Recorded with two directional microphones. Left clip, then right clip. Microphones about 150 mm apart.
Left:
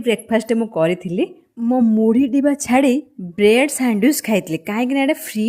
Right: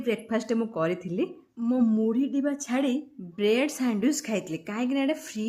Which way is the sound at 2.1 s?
40° left (ahead or behind).